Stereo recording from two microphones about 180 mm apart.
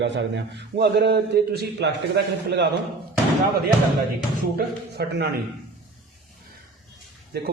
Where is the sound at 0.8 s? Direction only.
65° right (ahead or behind).